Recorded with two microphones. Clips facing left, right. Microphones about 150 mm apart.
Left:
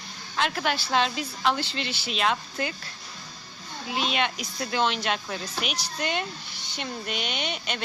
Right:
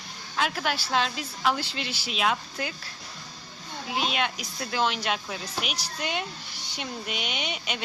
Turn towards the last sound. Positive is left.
turn(degrees=-5)  # may be behind; listen again after turning